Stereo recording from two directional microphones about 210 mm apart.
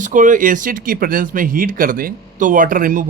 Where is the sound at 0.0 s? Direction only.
40° right (ahead or behind).